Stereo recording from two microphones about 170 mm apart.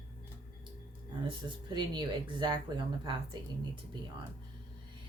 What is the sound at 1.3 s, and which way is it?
A woman's voice, 25° right (ahead or behind).